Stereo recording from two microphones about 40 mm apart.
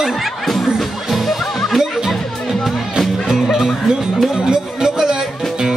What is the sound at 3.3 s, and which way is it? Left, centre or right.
Music, centre.